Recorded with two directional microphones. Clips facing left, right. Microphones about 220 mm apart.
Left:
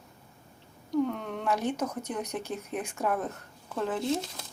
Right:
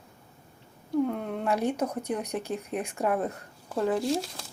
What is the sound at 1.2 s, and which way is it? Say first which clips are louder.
Speech: right 2 dB; 10° right (ahead or behind).